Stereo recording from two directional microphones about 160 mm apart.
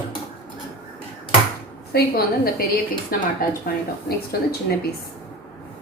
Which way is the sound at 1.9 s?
70° left (ahead or behind).